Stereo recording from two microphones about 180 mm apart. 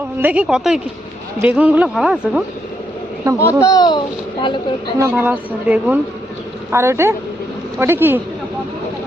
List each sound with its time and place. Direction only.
0.2 s a woman's voice: 10° right (ahead or behind)
3.3 s speech: 15° left (ahead or behind)
4.9 s speech: 15° right (ahead or behind)